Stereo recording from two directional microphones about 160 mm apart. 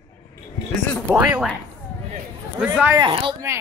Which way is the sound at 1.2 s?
10° right (ahead or behind).